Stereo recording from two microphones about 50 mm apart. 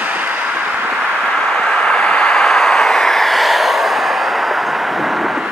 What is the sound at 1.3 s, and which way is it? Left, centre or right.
Vehicle, centre.